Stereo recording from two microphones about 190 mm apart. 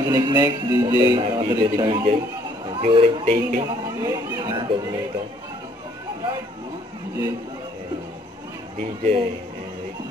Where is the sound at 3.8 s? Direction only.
20° right (ahead or behind).